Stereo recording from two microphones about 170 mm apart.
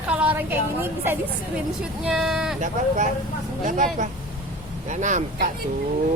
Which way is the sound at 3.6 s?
50° right (ahead or behind).